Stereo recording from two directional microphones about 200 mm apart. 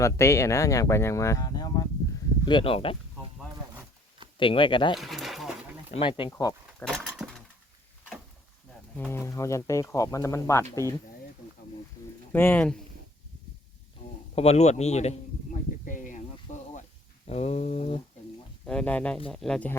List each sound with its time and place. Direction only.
0.0 s speech: 15° left (ahead or behind)
4.4 s speech: 25° left (ahead or behind)
4.9 s a sound: centre (ahead or behind)
5.9 s speech: 25° left (ahead or behind)
6.3 s speech: 10° left (ahead or behind)
6.8 s a sound: centre (ahead or behind)
9.0 s speech: 10° left (ahead or behind)
12.3 s speech: 10° left (ahead or behind)
14.3 s a man's voice: 30° left (ahead or behind)
15.9 s a sound: 40° left (ahead or behind)
16.5 s snake: 35° left (ahead or behind)
17.2 s a man's voice: 30° left (ahead or behind)
18.6 s speech: 5° left (ahead or behind)